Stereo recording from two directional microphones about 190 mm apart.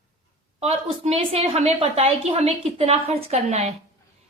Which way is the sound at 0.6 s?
35° right (ahead or behind).